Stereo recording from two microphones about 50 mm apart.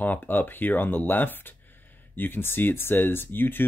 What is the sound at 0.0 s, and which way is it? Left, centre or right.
Speech, left.